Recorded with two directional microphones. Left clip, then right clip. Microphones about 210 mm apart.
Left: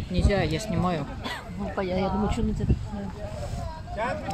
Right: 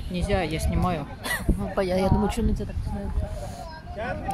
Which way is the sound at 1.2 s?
45° right (ahead or behind).